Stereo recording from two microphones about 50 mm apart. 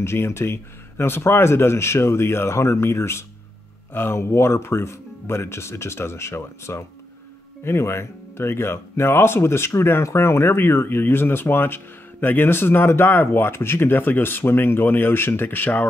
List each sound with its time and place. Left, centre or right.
0.0 s speech: left